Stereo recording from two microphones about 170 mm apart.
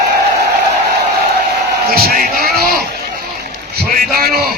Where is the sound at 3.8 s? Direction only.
60° right (ahead or behind).